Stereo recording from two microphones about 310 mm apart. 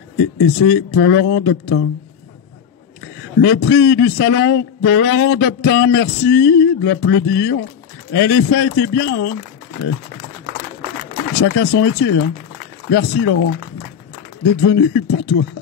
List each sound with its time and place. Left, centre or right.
0.2 s a man's voice: left
3.3 s a man's voice: left
11.4 s a man's voice: left